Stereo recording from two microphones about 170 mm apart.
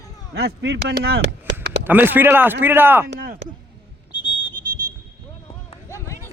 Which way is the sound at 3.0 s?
60° right (ahead or behind).